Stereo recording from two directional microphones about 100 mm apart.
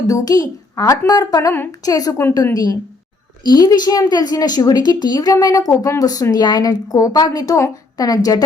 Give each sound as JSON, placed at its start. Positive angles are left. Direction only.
{"t": 0.1, "sound": "a woman's voice", "side_deg": 40}